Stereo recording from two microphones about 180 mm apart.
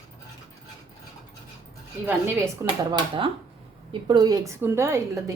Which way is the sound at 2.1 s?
10° right (ahead or behind).